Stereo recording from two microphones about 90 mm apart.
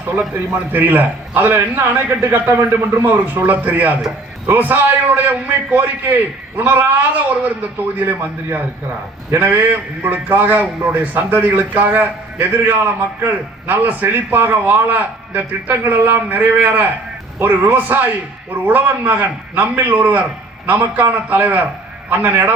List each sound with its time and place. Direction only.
0.7 s a man's voice: 20° right (ahead or behind)
3.1 s a man's voice: 20° right (ahead or behind)